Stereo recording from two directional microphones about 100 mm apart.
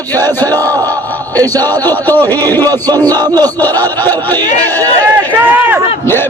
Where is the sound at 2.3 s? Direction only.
20° left (ahead or behind).